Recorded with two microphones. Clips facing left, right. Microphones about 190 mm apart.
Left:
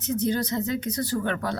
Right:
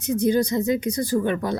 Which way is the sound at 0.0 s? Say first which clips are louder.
Right 5 dB; 15° right (ahead or behind).